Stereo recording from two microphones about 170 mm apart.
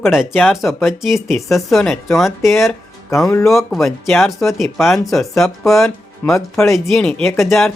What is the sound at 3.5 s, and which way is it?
Speech, centre (ahead or behind).